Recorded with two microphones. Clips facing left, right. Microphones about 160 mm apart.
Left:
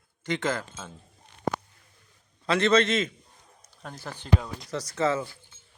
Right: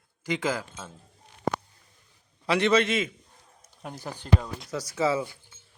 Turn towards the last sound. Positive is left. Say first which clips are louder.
# even
turn(degrees=-10)  # may be behind; listen again after turning